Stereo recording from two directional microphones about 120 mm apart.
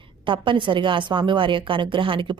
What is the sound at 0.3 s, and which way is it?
A woman's voice, 45° right (ahead or behind).